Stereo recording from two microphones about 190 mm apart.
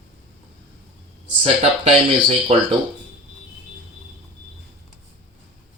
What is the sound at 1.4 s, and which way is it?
Speech, 35° right (ahead or behind).